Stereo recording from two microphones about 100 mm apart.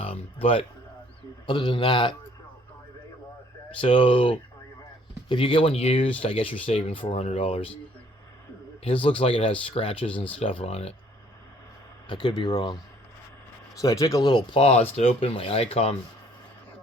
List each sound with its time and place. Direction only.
0.0 s a sound: 70° left (ahead or behind)
1.5 s speech: 55° left (ahead or behind)
3.8 s speech: 65° left (ahead or behind)
8.8 s speech: 70° left (ahead or behind); by 10.9 s 85° left
12.0 s speech: 50° left (ahead or behind)
13.7 s speech: 35° left (ahead or behind)
14.6 s speech: 85° left